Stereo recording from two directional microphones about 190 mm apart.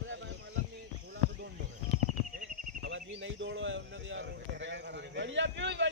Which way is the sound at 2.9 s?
75° right (ahead or behind).